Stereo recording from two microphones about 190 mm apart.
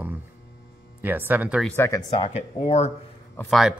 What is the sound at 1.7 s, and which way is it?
Speech, 10° left (ahead or behind).